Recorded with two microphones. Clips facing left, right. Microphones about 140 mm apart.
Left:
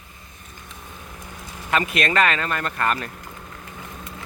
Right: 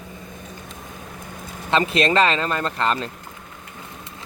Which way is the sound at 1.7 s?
30° right (ahead or behind).